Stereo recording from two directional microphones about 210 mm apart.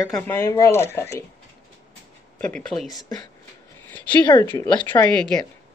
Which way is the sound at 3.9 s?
5° left (ahead or behind).